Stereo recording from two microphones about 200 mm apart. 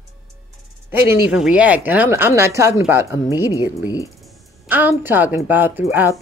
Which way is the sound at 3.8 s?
20° left (ahead or behind).